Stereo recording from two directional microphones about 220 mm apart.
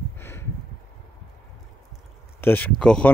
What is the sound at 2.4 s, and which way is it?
Speech, 10° left (ahead or behind).